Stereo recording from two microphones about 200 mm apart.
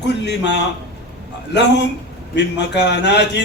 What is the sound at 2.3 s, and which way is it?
A man's voice, 60° left (ahead or behind).